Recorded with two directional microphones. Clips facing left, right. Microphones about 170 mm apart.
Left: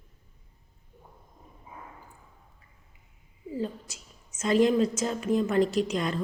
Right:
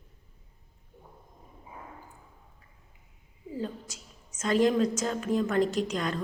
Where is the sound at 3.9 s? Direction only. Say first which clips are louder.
Right 1 dB; 10° left (ahead or behind).